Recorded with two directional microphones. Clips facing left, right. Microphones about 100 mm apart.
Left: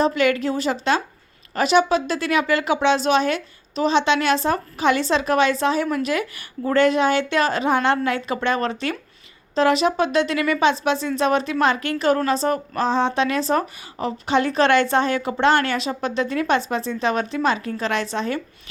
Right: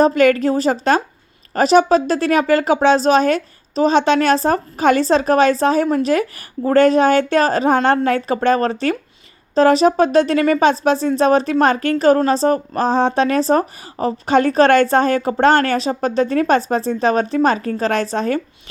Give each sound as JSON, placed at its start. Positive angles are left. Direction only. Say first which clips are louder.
{"t": 0.0, "sound": "speech", "louder": "right 6 dB", "side_deg": -45}